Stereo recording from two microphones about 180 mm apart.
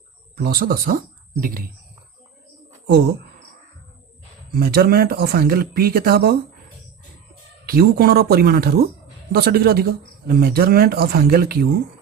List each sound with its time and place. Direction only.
0.3 s speech: 55° right (ahead or behind)
4.5 s speech: 60° right (ahead or behind)
7.7 s speech: 55° right (ahead or behind)